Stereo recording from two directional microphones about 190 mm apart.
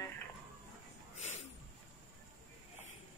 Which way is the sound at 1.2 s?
35° left (ahead or behind).